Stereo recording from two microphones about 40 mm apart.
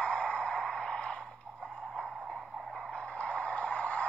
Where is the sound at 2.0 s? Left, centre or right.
Centre.